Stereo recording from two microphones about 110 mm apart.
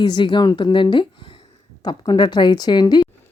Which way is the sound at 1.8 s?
40° left (ahead or behind).